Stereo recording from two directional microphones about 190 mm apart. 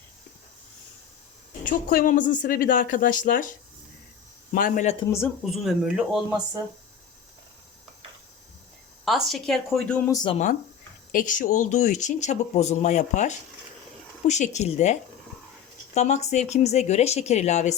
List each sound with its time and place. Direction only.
1.6 s a woman's voice: 45° left (ahead or behind)
4.5 s a woman's voice: 45° left (ahead or behind)
5.0 s a woman's voice: 15° left (ahead or behind)
5.4 s speech: centre (ahead or behind)
9.0 s speech: centre (ahead or behind)
10.3 s speech: 40° left (ahead or behind)
16.0 s speech: 35° left (ahead or behind)